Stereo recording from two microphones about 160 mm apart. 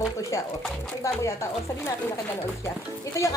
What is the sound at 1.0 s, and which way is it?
Speech, 20° left (ahead or behind).